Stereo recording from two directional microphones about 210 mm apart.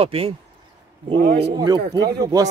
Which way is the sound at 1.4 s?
20° right (ahead or behind).